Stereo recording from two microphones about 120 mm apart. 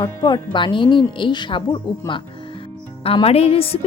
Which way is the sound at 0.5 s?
40° left (ahead or behind).